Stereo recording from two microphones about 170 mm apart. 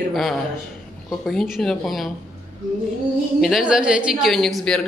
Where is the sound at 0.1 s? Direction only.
Centre (ahead or behind).